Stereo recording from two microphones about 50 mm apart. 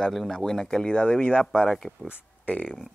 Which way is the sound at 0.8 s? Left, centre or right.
Left.